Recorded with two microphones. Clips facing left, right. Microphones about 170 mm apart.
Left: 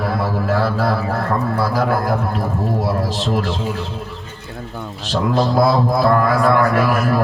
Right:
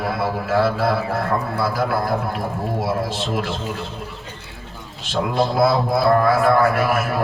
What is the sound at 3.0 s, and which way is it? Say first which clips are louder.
Speech: left 3 dB; 40° left (ahead or behind).